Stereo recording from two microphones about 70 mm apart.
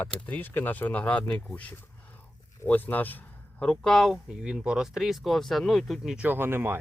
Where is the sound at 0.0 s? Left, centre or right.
Left.